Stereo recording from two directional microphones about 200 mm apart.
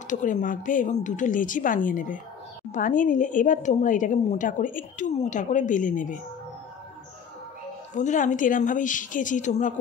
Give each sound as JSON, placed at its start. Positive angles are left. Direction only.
{"t": 0.1, "sound": "speech", "side_deg": 40}
{"t": 7.9, "sound": "speech", "side_deg": 40}